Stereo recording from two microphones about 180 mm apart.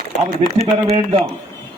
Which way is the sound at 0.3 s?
55° right (ahead or behind).